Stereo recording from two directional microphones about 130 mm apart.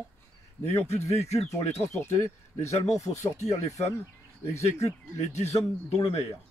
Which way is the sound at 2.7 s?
60° left (ahead or behind).